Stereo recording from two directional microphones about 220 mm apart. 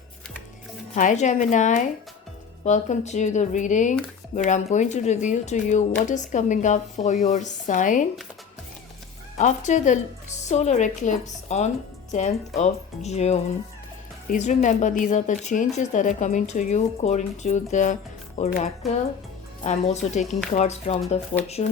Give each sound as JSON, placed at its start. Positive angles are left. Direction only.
{"t": 0.9, "sound": "speech", "side_deg": 35}
{"t": 9.4, "sound": "speech", "side_deg": 35}